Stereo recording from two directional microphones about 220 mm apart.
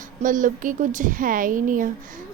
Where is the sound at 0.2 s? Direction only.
35° right (ahead or behind).